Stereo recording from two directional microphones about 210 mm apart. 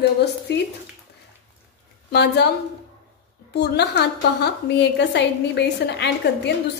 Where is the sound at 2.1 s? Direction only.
55° left (ahead or behind).